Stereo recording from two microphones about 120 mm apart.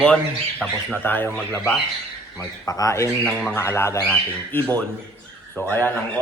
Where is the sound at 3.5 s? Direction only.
20° left (ahead or behind).